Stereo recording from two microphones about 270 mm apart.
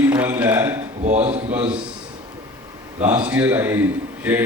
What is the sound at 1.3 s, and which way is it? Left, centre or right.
Speech, right.